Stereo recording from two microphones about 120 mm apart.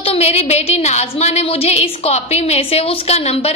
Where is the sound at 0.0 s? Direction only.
60° left (ahead or behind).